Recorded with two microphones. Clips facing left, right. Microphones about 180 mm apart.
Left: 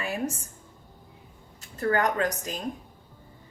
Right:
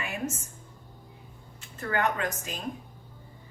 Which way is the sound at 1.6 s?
40° left (ahead or behind).